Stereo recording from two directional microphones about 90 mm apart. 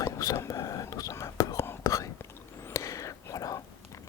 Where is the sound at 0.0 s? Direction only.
40° left (ahead or behind).